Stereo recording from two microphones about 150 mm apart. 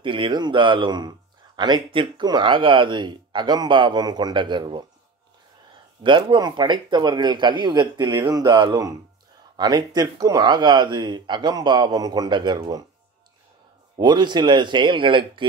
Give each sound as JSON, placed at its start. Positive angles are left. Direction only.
{"t": 0.0, "sound": "speech", "side_deg": -35}
{"t": 6.0, "sound": "speech", "side_deg": -30}
{"t": 13.9, "sound": "speech", "side_deg": -30}